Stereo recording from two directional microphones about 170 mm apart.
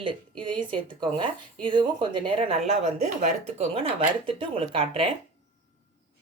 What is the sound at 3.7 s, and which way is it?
Speech, 35° right (ahead or behind).